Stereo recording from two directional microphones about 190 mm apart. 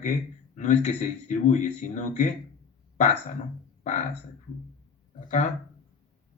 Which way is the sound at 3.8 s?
40° left (ahead or behind).